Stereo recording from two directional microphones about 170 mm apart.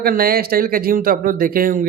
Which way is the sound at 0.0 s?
60° right (ahead or behind).